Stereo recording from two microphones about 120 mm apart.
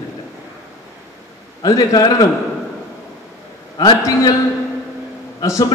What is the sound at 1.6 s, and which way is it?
Speech, 30° left (ahead or behind).